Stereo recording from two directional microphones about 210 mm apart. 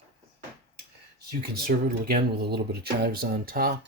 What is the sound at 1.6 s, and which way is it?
Speech, 45° right (ahead or behind).